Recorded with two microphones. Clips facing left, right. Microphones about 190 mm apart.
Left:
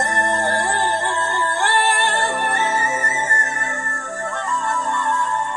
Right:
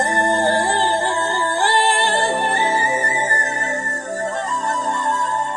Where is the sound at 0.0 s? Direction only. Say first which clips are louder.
Right 3 dB; 30° right (ahead or behind).